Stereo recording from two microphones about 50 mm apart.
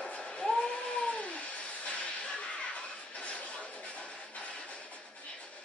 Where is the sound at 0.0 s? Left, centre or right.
Left.